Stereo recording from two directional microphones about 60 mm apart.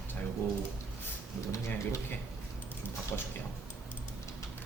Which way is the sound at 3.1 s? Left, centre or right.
Left.